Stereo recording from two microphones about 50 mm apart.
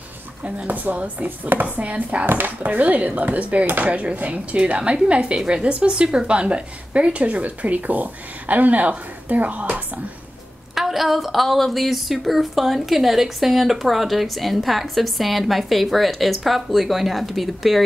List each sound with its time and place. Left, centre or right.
0.4 s a woman's voice: right
10.7 s a woman's voice: centre